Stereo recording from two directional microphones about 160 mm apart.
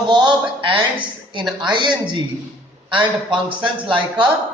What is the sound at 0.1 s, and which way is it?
A woman's voice, 30° right (ahead or behind).